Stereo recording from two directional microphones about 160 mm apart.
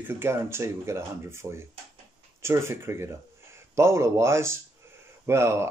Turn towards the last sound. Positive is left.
turn(degrees=-15)  # may be behind; listen again after turning